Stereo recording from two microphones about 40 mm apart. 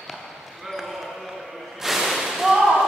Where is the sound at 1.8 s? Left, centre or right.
Centre.